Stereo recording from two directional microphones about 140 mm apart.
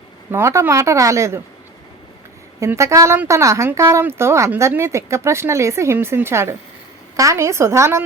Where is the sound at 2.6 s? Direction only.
20° right (ahead or behind).